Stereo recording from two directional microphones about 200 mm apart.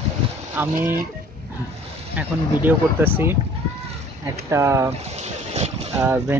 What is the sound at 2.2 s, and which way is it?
Speech, 10° right (ahead or behind).